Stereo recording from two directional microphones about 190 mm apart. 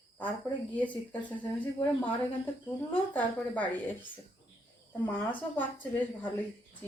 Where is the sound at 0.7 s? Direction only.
10° left (ahead or behind).